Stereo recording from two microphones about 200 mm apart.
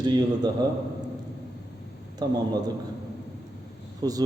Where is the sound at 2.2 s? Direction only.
20° right (ahead or behind).